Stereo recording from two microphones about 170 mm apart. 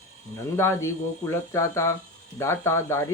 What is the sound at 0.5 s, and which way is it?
Speech, 15° left (ahead or behind).